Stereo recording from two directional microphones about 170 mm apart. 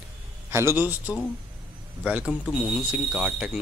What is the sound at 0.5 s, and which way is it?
A man's voice, 15° right (ahead or behind).